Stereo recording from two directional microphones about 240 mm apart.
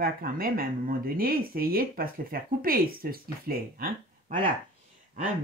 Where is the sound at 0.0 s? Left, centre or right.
Right.